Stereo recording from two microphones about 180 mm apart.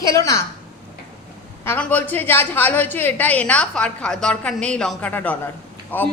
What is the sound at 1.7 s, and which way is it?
A woman's voice, 10° left (ahead or behind).